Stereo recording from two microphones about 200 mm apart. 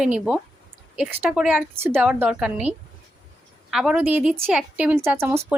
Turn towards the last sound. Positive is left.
turn(degrees=-10)  # may be behind; listen again after turning